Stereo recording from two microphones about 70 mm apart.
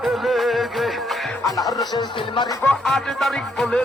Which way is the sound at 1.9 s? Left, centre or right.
Left.